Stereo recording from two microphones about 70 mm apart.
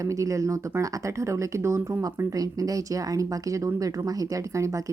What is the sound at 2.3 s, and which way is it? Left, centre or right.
Speech, right.